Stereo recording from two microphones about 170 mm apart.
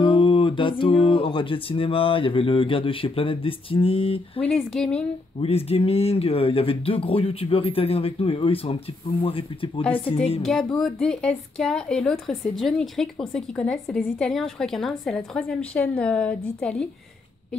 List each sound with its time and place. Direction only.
0.0 s speech: 30° left (ahead or behind)
10.4 s speech: centre (ahead or behind)